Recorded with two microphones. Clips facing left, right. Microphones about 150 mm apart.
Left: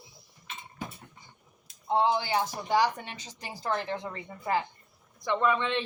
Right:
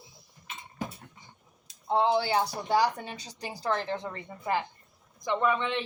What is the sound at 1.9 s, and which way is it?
Speech, 35° right (ahead or behind).